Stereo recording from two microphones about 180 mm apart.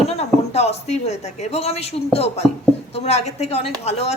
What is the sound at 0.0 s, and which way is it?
A woman's voice, 35° left (ahead or behind).